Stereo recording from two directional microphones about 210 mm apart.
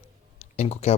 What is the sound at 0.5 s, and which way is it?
Speech, 30° left (ahead or behind).